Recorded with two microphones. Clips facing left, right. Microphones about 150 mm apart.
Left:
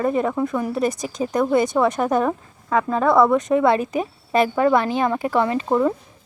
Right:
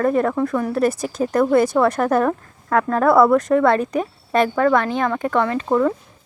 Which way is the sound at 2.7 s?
5° right (ahead or behind).